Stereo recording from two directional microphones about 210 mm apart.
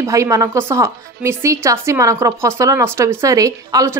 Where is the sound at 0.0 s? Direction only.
15° right (ahead or behind).